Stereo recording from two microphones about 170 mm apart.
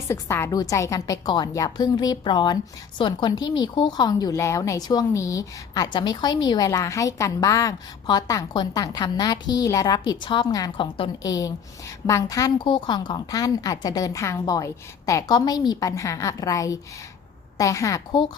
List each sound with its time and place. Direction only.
0.1 s speech: 15° left (ahead or behind)